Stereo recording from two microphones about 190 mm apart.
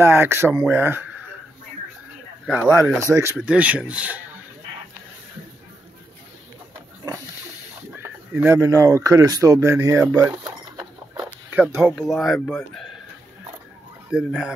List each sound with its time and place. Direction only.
0.0 s speech: 10° right (ahead or behind)
3.0 s speech: 15° right (ahead or behind)
8.0 s speech: 10° right (ahead or behind)
14.1 s speech: 5° right (ahead or behind)